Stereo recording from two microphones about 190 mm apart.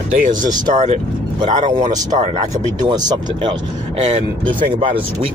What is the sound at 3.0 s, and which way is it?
Speech, 25° right (ahead or behind).